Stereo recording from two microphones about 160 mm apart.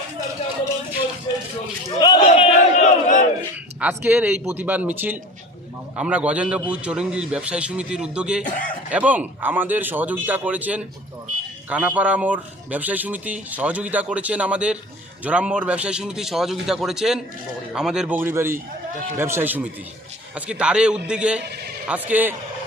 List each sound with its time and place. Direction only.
2.0 s speech: 25° left (ahead or behind)
2.2 s battle cry: 40° left (ahead or behind)
3.8 s speech: 10° right (ahead or behind)
8.4 s speech: 55° left (ahead or behind)
8.9 s a man's voice: 10° right (ahead or behind)